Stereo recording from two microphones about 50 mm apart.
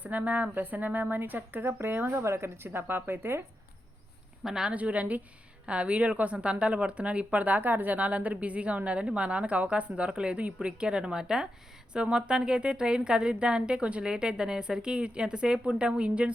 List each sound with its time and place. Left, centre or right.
0.0 s speech: right
2.0 s speech: right
2.6 s speech: right
4.4 s a woman's voice: centre
4.7 s a woman's voice: right
7.9 s a woman's voice: right